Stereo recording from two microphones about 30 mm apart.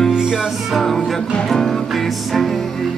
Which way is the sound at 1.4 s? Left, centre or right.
Centre.